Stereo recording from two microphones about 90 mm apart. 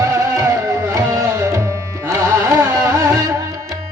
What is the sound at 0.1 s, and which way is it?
Music, 40° right (ahead or behind).